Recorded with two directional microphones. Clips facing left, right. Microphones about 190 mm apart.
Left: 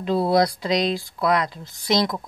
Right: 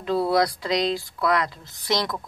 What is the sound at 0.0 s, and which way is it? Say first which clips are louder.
Speech: left 2 dB; 20° left (ahead or behind).